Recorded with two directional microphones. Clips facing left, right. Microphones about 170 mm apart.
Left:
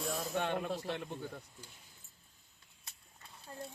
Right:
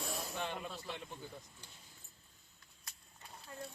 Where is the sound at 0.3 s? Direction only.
60° left (ahead or behind).